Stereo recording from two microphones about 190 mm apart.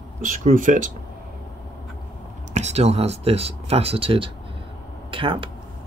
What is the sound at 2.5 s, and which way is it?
Speech, 35° right (ahead or behind).